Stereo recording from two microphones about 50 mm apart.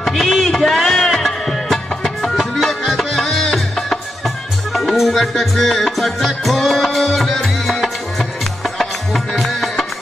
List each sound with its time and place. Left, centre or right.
0.0 s music: centre